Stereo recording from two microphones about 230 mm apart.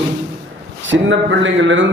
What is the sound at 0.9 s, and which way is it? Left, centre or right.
A man's voice, right.